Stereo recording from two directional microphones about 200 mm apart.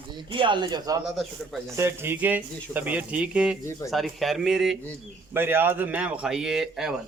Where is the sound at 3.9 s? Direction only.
Centre (ahead or behind).